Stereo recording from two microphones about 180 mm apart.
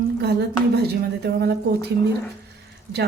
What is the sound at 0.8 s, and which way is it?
Speech, 65° right (ahead or behind).